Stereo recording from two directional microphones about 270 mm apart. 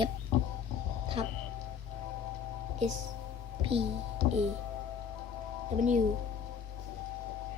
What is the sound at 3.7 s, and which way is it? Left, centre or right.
Speech, right.